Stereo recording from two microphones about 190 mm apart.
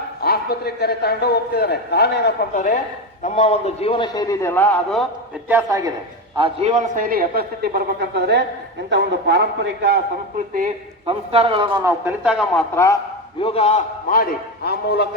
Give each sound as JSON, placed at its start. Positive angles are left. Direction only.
{"t": 0.2, "sound": "a man's voice", "side_deg": 55}
{"t": 3.2, "sound": "a man's voice", "side_deg": 40}
{"t": 5.5, "sound": "a man's voice", "side_deg": -15}
{"t": 6.3, "sound": "a man's voice", "side_deg": -30}
{"t": 11.0, "sound": "a man's voice", "side_deg": -30}
{"t": 12.5, "sound": "a man's voice", "side_deg": 15}
{"t": 13.4, "sound": "a man's voice", "side_deg": 30}